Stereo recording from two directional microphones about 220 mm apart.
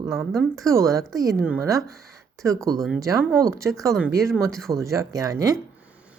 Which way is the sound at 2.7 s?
Centre (ahead or behind).